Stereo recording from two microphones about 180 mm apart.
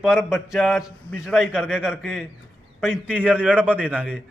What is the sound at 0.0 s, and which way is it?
Speech, 5° right (ahead or behind).